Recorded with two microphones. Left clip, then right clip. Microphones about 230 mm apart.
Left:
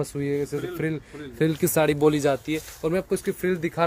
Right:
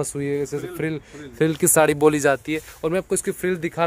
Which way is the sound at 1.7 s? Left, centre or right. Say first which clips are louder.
Right 5 dB; right.